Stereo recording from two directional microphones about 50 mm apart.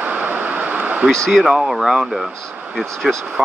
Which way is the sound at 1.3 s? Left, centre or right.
Centre.